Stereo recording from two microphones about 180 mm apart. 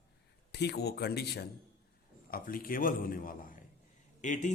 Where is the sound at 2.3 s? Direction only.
55° left (ahead or behind).